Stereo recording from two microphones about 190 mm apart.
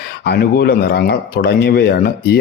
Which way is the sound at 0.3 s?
55° left (ahead or behind).